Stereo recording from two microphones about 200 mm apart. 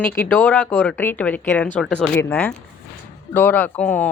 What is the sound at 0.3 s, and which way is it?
Speech, 10° left (ahead or behind).